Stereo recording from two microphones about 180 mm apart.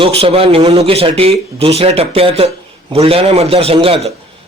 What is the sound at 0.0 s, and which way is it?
A man's voice, 35° right (ahead or behind).